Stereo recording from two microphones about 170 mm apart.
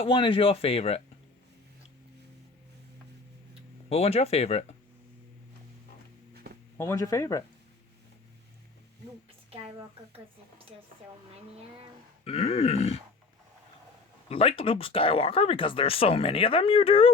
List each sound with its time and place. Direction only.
0.0 s speech: 30° left (ahead or behind)
3.8 s speech: 35° left (ahead or behind)
6.7 s speech: 15° left (ahead or behind)
9.5 s speech: 35° right (ahead or behind)
12.2 s speech: 35° left (ahead or behind)
14.3 s speech: 35° left (ahead or behind)